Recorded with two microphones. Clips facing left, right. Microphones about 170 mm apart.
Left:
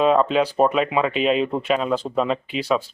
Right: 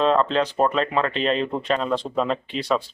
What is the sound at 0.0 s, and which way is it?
Speech, 10° left (ahead or behind).